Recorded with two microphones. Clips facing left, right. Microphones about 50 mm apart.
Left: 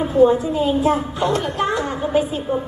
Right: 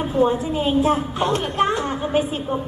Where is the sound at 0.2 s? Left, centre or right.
Right.